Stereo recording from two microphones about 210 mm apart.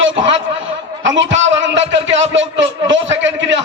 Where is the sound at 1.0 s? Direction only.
60° right (ahead or behind).